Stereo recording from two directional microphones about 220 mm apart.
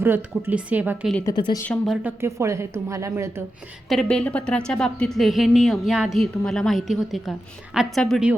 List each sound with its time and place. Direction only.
0.0 s a woman's voice: 5° right (ahead or behind)
1.1 s speech: 15° left (ahead or behind)
1.6 s a woman's voice: 5° left (ahead or behind)
2.0 s a woman's voice: 10° right (ahead or behind)
3.8 s a woman's voice: centre (ahead or behind)